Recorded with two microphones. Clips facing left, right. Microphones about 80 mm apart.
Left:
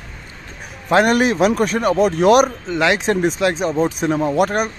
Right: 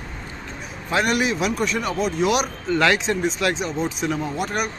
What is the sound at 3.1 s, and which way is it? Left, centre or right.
A man's voice, left.